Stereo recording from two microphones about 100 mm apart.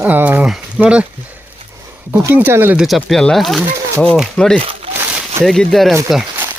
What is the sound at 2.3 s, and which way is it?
Speech, 20° right (ahead or behind).